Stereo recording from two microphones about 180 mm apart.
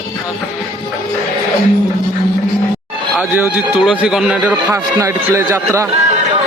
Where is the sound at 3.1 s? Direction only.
5° right (ahead or behind).